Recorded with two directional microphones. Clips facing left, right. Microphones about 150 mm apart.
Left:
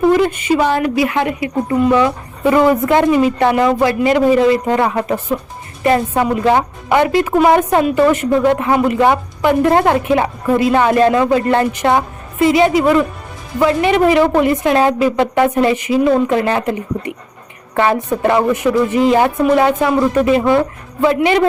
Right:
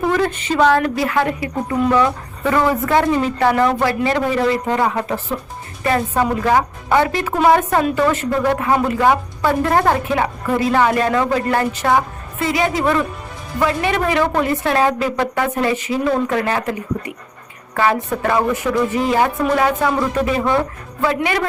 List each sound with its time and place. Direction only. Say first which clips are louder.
0.2 s a woman's voice: left 2 dB; 10° left (ahead or behind)
6.4 s a woman's voice: left 3 dB; 20° left (ahead or behind)
17.7 s speech: left 3 dB; 20° left (ahead or behind)